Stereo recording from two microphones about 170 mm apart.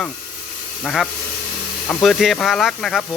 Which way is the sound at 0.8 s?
Centre (ahead or behind).